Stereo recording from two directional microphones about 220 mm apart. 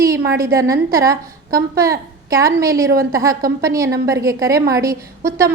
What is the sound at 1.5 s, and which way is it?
Speech, 45° right (ahead or behind).